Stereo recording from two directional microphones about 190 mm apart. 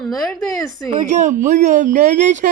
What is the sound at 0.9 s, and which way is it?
Speech, 40° right (ahead or behind).